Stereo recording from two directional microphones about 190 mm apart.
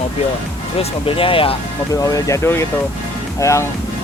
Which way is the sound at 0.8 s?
30° left (ahead or behind).